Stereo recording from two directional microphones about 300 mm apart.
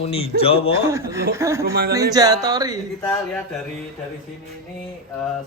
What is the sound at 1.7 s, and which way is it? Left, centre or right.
Speech, right.